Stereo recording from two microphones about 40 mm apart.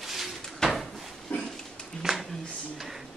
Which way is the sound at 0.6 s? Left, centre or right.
Centre.